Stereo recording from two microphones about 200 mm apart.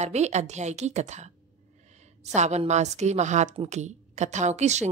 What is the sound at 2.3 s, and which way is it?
A woman's voice, 35° right (ahead or behind).